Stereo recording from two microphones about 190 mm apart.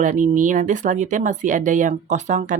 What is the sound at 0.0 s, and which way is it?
Speech, 40° right (ahead or behind).